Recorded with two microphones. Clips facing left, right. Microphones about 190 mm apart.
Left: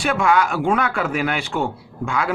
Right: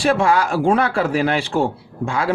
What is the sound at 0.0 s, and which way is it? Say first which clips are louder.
Speech: right 2 dB; 30° right (ahead or behind).